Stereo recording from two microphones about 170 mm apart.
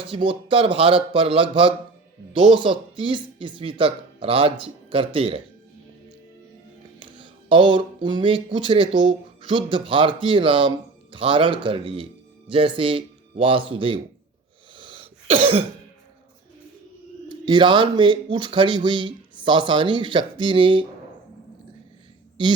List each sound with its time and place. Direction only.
0.0 s speech: 30° right (ahead or behind)
7.0 s speech: 30° right (ahead or behind)
14.8 s cough: 30° right (ahead or behind)
17.2 s speech: 30° right (ahead or behind)